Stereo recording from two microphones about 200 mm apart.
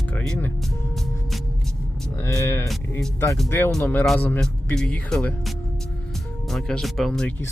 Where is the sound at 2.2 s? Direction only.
15° left (ahead or behind).